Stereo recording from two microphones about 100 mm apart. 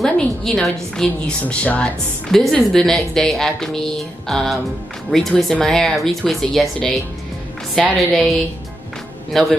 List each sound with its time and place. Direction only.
0.0 s a woman's voice: 5° left (ahead or behind)